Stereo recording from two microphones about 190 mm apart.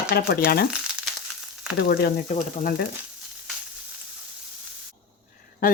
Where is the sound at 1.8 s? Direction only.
55° left (ahead or behind).